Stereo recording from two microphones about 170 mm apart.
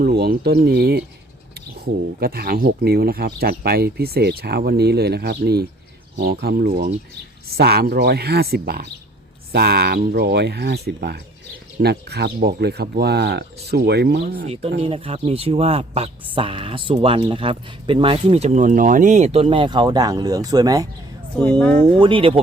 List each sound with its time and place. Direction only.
0.0 s speech: 65° right (ahead or behind)
14.4 s speech: 35° right (ahead or behind)
21.6 s speech: 10° left (ahead or behind)
21.8 s speech: 25° right (ahead or behind)